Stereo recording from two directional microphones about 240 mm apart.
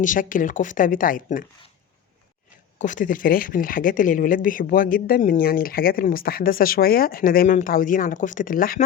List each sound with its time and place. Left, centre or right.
0.0 s speech: left
2.7 s speech: left